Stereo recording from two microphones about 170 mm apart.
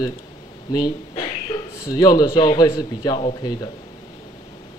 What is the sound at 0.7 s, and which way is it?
A man's voice, 25° left (ahead or behind).